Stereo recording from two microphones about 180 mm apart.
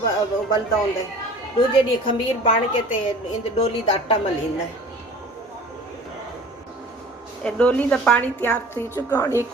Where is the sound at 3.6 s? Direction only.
30° left (ahead or behind).